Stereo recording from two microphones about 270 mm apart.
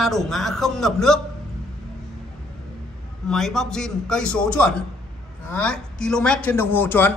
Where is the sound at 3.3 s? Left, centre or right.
Centre.